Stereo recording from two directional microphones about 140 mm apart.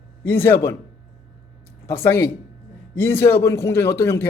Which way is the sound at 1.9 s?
15° left (ahead or behind).